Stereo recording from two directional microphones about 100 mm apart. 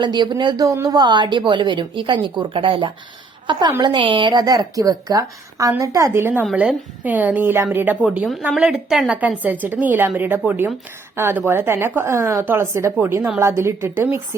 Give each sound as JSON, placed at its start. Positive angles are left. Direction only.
{"t": 0.0, "sound": "a woman's voice", "side_deg": -50}
{"t": 6.5, "sound": "a woman's voice", "side_deg": -15}